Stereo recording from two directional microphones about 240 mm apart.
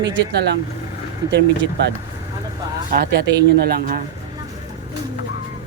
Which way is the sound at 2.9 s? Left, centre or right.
Right.